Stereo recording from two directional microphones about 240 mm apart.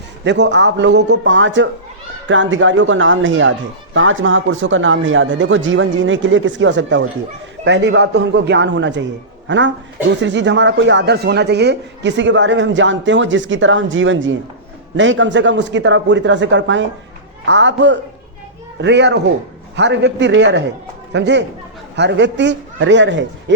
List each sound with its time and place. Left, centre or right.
0.3 s speech: right